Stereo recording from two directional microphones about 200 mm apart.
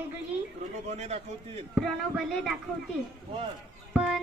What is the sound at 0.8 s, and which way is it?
Speech, 35° right (ahead or behind).